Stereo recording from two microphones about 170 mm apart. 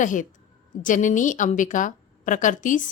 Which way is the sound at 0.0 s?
50° left (ahead or behind).